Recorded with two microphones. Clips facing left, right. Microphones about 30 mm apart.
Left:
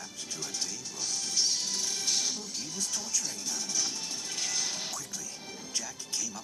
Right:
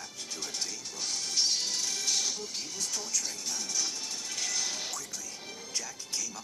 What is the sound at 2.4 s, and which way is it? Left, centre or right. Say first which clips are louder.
Speech: even; centre.